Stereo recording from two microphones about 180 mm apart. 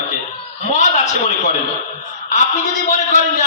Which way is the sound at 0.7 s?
40° left (ahead or behind).